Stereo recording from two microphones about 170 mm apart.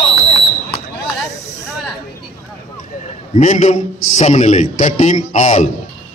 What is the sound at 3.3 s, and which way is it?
A man's voice, 45° left (ahead or behind).